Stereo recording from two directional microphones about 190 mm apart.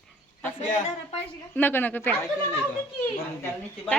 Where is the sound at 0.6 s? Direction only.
40° left (ahead or behind).